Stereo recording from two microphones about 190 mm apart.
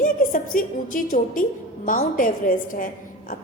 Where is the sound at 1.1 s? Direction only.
45° left (ahead or behind).